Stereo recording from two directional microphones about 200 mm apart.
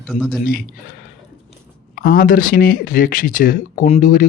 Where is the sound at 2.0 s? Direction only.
45° left (ahead or behind).